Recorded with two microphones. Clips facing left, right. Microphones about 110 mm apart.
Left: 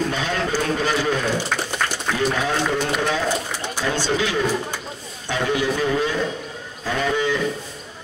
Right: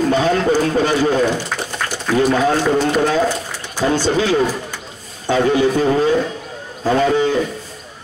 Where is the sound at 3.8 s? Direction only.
35° right (ahead or behind).